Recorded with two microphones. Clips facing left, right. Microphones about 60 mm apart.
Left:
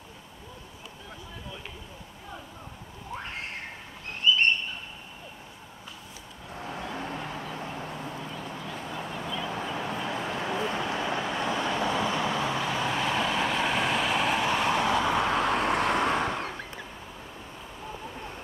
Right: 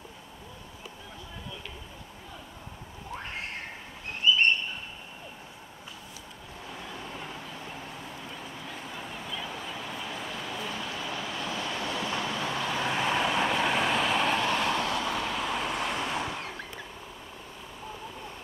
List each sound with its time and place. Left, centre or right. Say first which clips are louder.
6.6 s vehicle: left 6 dB; left
8.6 s a sound: left 3 dB; centre
9.5 s vehicle: left 5 dB; left; by 12.6 s centre
12.6 s vehicle: left 1 dB; centre
12.9 s vehicle: right 2 dB; centre
14.7 s vehicle: left 4 dB; centre
15.3 s vehicle: left 6 dB; left
16.3 s vehicle: left 4 dB; centre